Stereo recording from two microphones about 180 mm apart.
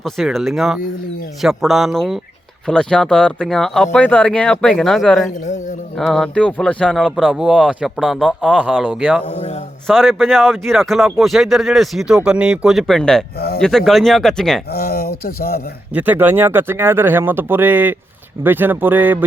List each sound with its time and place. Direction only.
0.0 s speech: centre (ahead or behind)
9.2 s a man's voice: 40° left (ahead or behind)
9.8 s speech: centre (ahead or behind)
14.7 s speech: 55° left (ahead or behind)
15.9 s speech: 10° right (ahead or behind)